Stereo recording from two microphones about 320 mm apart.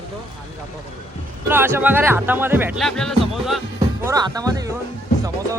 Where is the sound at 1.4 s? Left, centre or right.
Centre.